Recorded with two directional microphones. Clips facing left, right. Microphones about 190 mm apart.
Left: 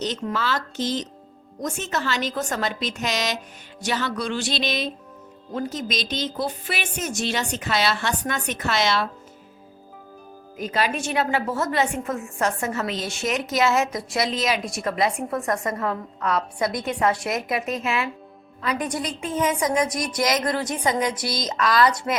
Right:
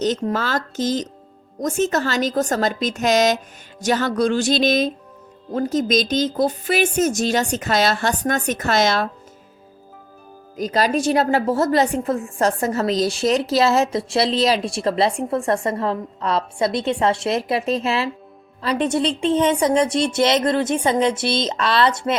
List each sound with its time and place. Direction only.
0.0 s speech: 40° right (ahead or behind)
10.6 s a woman's voice: 40° right (ahead or behind)